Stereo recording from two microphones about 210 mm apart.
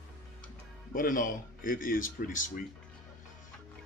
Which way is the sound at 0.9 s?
40° left (ahead or behind).